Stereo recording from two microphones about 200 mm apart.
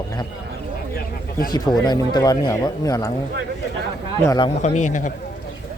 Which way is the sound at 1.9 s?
20° left (ahead or behind).